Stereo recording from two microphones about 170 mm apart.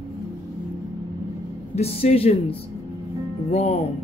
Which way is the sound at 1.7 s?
35° left (ahead or behind).